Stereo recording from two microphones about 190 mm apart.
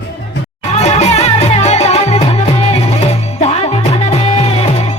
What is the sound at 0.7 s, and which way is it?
Music, 35° left (ahead or behind).